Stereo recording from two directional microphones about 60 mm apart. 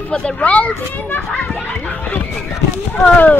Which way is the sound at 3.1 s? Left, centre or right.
Left.